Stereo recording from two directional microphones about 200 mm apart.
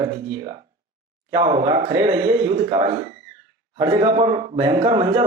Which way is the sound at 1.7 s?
35° right (ahead or behind).